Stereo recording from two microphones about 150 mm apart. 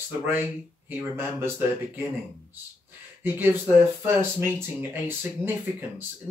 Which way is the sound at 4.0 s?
15° right (ahead or behind).